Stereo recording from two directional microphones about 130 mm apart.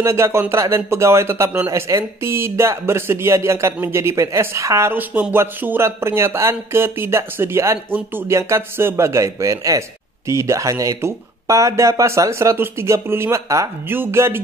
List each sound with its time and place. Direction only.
0.0 s a man's voice: 20° right (ahead or behind)